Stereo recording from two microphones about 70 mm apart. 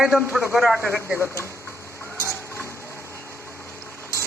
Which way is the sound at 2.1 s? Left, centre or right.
Right.